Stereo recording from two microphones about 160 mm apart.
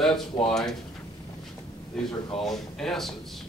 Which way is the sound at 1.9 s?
5° left (ahead or behind).